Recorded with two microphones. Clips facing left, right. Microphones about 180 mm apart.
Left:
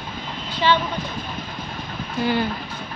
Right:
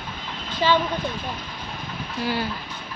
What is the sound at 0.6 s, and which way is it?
Speech, 40° right (ahead or behind).